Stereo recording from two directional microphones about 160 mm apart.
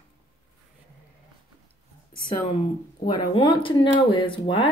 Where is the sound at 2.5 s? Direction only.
30° left (ahead or behind).